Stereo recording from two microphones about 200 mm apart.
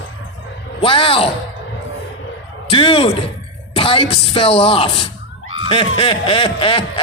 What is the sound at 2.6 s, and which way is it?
A man's voice, 25° left (ahead or behind).